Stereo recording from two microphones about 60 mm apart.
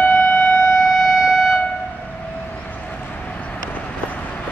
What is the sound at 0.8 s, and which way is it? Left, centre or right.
Civil defense siren, centre.